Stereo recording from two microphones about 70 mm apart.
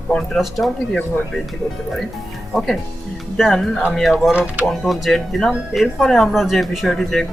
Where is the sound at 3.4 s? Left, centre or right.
Centre.